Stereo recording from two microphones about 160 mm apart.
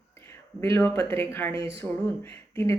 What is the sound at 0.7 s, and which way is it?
Speech, 15° left (ahead or behind).